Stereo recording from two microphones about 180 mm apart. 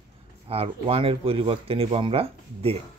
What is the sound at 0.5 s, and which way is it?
Speech, 35° right (ahead or behind).